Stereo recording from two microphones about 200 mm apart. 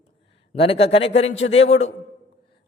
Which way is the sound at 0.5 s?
30° left (ahead or behind).